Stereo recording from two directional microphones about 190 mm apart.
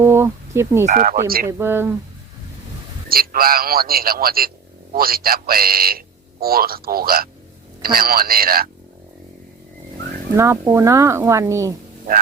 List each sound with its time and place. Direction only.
0.0 s speech: 15° right (ahead or behind)
0.9 s a man's voice: 45° right (ahead or behind)
1.5 s speech: 10° right (ahead or behind)
3.1 s a man's voice: 50° right (ahead or behind)
10.3 s speech: 15° right (ahead or behind)